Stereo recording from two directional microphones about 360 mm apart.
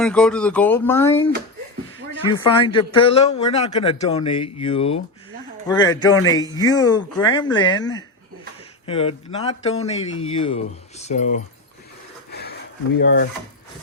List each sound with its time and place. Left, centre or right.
0.0 s speech: centre
2.3 s a man's voice: centre
12.3 s a sound: left
13.0 s speech: left